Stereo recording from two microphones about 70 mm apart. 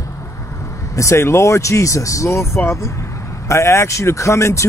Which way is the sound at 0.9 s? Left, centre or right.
Left.